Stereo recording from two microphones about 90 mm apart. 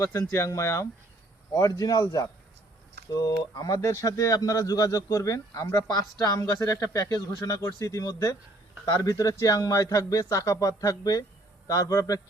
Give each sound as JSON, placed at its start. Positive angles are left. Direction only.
{"t": 0.0, "sound": "speech", "side_deg": 35}
{"t": 7.3, "sound": "speech", "side_deg": 50}
{"t": 7.6, "sound": "speech", "side_deg": 30}